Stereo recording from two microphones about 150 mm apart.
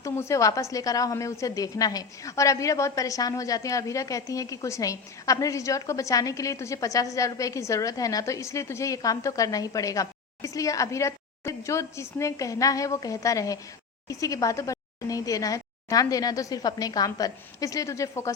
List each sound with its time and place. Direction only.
0.0 s a woman's voice: 20° left (ahead or behind)